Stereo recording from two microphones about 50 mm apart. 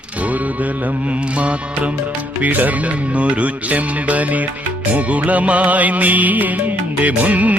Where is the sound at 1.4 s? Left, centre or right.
Right.